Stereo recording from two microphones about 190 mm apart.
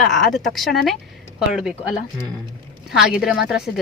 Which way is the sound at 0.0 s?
Centre (ahead or behind).